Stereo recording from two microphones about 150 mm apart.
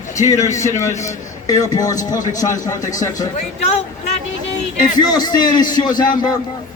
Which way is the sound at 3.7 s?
50° left (ahead or behind).